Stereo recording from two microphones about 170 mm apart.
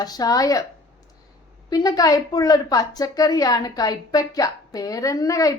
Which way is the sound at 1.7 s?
20° left (ahead or behind).